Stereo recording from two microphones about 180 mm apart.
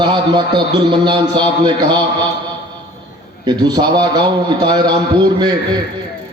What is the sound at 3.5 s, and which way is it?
A man's voice, 20° right (ahead or behind).